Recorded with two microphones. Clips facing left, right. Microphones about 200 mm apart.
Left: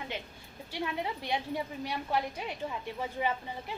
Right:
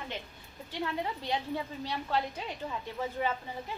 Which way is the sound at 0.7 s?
15° left (ahead or behind).